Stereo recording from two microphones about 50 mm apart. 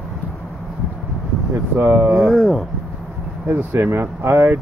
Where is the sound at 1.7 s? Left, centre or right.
Right.